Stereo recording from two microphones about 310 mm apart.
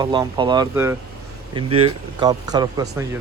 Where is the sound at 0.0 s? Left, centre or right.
Centre.